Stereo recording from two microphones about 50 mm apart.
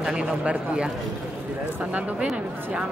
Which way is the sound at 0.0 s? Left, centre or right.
Centre.